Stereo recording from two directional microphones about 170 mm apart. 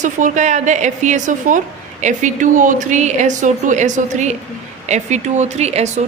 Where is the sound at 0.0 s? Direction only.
45° right (ahead or behind).